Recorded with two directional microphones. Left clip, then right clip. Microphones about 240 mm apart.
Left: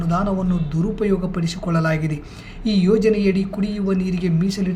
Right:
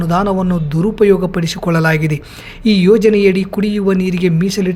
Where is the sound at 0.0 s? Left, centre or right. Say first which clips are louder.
Right 7 dB; right.